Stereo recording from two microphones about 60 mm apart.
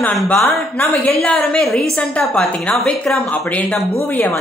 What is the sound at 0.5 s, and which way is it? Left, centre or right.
Speech, left.